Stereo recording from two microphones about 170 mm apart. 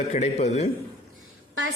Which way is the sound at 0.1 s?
40° left (ahead or behind).